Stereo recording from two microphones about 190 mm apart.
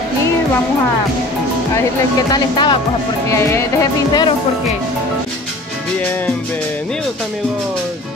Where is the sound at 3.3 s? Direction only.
15° left (ahead or behind).